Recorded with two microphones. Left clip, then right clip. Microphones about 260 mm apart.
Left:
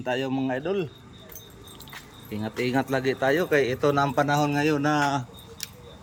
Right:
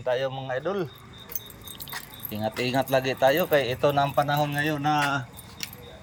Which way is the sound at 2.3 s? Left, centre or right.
Centre.